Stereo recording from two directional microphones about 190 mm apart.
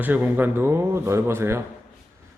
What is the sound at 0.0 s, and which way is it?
A man's voice, 10° right (ahead or behind).